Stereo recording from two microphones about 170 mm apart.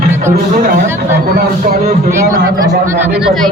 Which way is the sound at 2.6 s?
15° right (ahead or behind).